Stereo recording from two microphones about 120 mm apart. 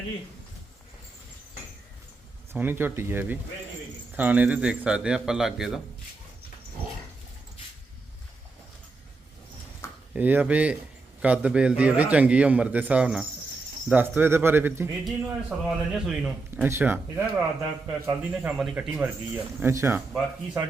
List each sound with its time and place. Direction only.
2.5 s speech: 15° right (ahead or behind)
10.2 s speech: 15° right (ahead or behind)
15.0 s a man's voice: 5° right (ahead or behind)
16.6 s speech: 20° right (ahead or behind)
18.1 s speech: 10° right (ahead or behind)